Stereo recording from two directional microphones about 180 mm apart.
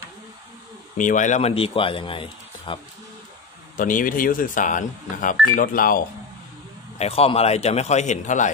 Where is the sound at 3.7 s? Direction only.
50° left (ahead or behind).